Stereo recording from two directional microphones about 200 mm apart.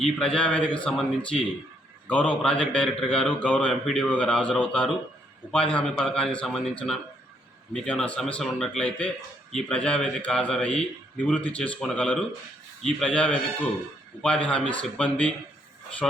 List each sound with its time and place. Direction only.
0.0 s a man's voice: centre (ahead or behind)